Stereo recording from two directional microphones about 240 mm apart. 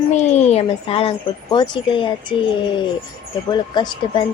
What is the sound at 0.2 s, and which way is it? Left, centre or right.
Speech, left.